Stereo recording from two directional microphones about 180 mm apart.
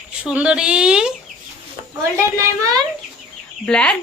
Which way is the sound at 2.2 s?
15° right (ahead or behind).